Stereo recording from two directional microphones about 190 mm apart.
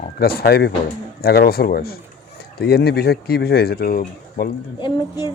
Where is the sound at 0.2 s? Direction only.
55° left (ahead or behind).